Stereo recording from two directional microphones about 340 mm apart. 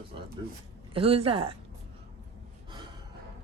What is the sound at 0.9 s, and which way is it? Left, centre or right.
Speech, centre.